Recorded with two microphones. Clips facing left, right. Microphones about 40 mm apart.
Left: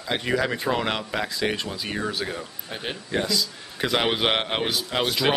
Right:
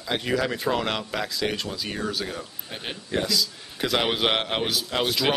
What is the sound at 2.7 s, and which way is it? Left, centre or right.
A man's voice, centre.